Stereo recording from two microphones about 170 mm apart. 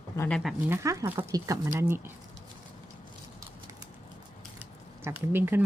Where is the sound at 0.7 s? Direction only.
20° right (ahead or behind).